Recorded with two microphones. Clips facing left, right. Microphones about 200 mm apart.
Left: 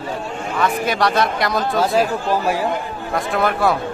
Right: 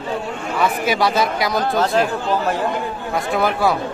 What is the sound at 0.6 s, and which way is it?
Speech, 5° right (ahead or behind).